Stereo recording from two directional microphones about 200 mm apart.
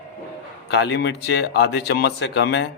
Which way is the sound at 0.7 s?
60° left (ahead or behind).